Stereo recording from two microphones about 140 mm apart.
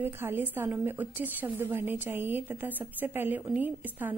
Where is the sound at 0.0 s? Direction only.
15° right (ahead or behind).